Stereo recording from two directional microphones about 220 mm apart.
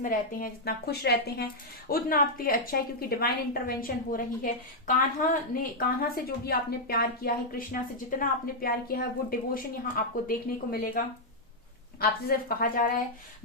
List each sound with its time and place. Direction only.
0.0 s a woman's voice: 40° left (ahead or behind)
12.5 s a woman's voice: 40° left (ahead or behind)